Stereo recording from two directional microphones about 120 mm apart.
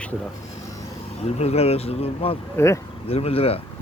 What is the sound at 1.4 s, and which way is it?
Speech, 60° left (ahead or behind).